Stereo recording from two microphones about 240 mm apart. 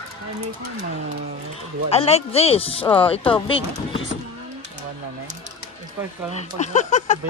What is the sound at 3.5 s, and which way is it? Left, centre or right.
Speech, left.